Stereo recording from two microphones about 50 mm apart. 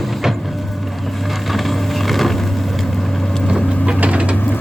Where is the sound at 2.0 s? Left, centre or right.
Centre.